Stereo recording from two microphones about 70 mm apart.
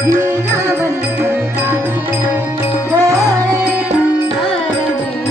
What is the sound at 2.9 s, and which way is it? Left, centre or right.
Music, right.